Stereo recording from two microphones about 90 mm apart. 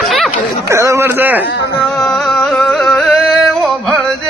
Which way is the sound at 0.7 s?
30° right (ahead or behind).